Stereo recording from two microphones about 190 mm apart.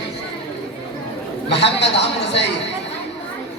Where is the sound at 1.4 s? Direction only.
65° left (ahead or behind).